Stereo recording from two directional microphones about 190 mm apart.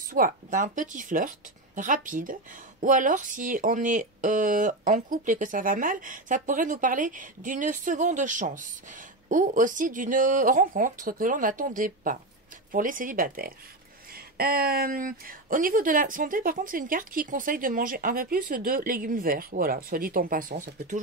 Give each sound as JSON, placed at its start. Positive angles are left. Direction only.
{"t": 0.1, "sound": "speech", "side_deg": -45}